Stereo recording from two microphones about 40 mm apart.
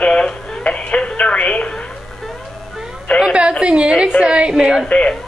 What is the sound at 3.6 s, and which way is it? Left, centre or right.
A woman's voice, right.